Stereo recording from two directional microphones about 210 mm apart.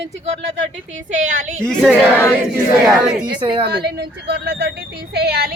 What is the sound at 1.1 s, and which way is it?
Speech, 35° right (ahead or behind).